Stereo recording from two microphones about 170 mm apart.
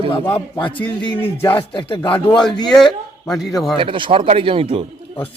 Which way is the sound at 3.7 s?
30° right (ahead or behind).